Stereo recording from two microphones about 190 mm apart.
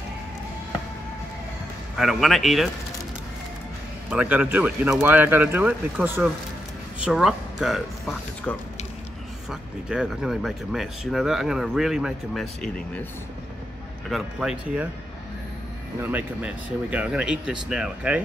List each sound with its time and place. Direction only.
2.0 s speech: centre (ahead or behind)
4.1 s speech: 5° right (ahead or behind)
9.5 s speech: 5° right (ahead or behind)
14.0 s speech: centre (ahead or behind)
16.0 s speech: 10° right (ahead or behind)